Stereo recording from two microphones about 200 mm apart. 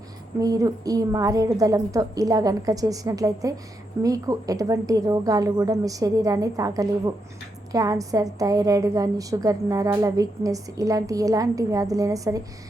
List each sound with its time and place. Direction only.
0.3 s a woman's voice: 15° right (ahead or behind)